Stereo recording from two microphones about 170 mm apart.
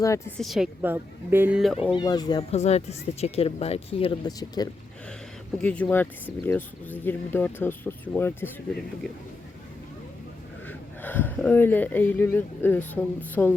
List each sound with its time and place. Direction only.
0.0 s speech: 20° left (ahead or behind)
0.3 s a woman's voice: centre (ahead or behind)
0.8 s a woman's voice: 15° right (ahead or behind)
2.0 s speech: 25° left (ahead or behind)
2.5 s speech: 40° left (ahead or behind)
4.3 s speech: 20° left (ahead or behind)
5.6 s speech: 10° left (ahead or behind)
10.7 s speech: 10° left (ahead or behind)